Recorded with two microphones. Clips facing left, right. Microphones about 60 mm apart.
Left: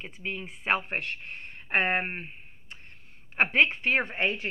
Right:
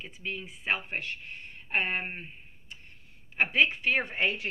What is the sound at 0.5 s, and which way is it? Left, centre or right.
Speech, left.